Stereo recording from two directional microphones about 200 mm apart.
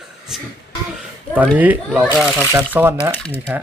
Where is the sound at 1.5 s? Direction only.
10° right (ahead or behind).